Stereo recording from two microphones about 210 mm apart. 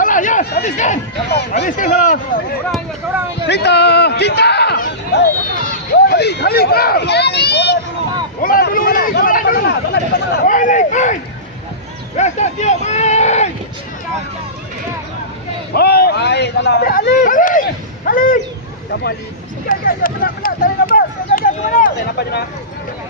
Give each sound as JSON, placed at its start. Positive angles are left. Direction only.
{"t": 0.0, "sound": "chatter", "side_deg": 40}
{"t": 1.3, "sound": "speech", "side_deg": 55}
{"t": 1.6, "sound": "speech", "side_deg": 35}
{"t": 3.4, "sound": "a sound", "side_deg": 55}
{"t": 5.9, "sound": "speech", "side_deg": 50}
{"t": 8.4, "sound": "a sound", "side_deg": 45}
{"t": 10.4, "sound": "speech", "side_deg": 40}
{"t": 15.7, "sound": "speech", "side_deg": 50}
{"t": 19.6, "sound": "speech", "side_deg": 40}